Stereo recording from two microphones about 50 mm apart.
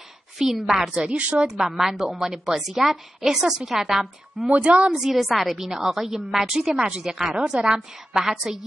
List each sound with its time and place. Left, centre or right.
0.4 s a woman's voice: centre
0.9 s speech: right
1.5 s a woman's voice: centre
4.5 s speech: right
4.9 s a woman's voice: centre